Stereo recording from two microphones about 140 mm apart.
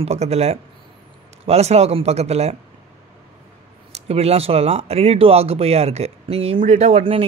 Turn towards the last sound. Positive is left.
turn(degrees=-45)  # may be behind; listen again after turning